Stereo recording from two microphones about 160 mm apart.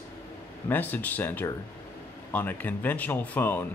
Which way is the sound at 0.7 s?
10° left (ahead or behind).